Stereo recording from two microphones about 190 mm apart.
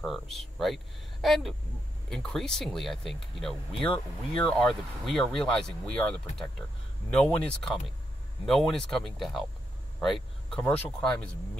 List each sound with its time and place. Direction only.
0.0 s speech: centre (ahead or behind)
10.5 s speech: 5° left (ahead or behind)